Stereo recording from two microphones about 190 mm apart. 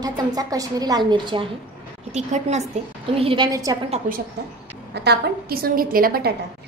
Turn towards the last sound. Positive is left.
turn(degrees=-50)  # may be behind; listen again after turning